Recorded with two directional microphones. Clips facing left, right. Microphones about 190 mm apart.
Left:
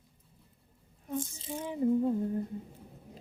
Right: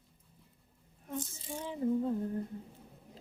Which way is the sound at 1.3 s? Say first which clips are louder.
Left 4 dB; 20° left (ahead or behind).